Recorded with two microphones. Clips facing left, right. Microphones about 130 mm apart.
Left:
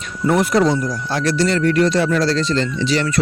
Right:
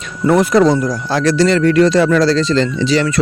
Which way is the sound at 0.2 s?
90° right.